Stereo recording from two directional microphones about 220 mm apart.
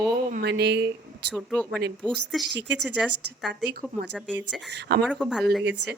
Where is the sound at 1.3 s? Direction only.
5° left (ahead or behind).